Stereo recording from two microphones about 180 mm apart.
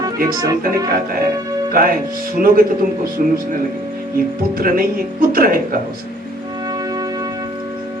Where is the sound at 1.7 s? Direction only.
55° right (ahead or behind).